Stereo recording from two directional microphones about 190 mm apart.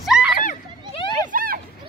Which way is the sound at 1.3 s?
50° right (ahead or behind).